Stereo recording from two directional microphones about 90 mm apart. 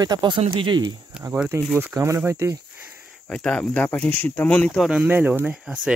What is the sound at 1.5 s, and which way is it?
Speech, 35° right (ahead or behind).